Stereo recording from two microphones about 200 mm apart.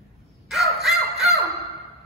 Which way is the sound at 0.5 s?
Centre (ahead or behind).